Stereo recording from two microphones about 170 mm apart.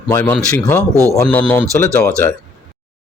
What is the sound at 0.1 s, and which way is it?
Speech, 15° left (ahead or behind).